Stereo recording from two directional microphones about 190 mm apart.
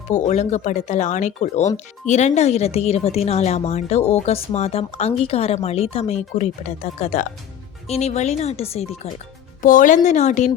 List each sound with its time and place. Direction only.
0.1 s speech: 40° left (ahead or behind)
9.6 s speech: 45° left (ahead or behind)